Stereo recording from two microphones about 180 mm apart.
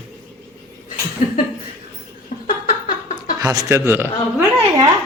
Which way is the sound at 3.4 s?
20° right (ahead or behind).